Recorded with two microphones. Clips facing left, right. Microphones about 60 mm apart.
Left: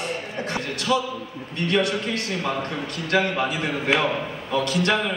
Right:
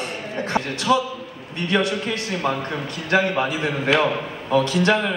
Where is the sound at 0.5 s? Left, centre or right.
Right.